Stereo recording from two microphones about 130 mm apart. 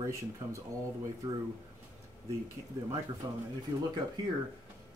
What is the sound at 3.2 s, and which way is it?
Speech, 30° right (ahead or behind).